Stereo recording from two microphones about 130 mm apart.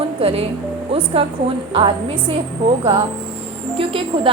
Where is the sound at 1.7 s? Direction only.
40° right (ahead or behind).